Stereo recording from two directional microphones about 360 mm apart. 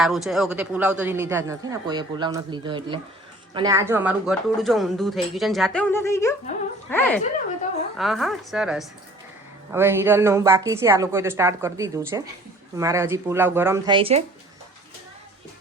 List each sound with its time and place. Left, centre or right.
0.0 s a woman's voice: centre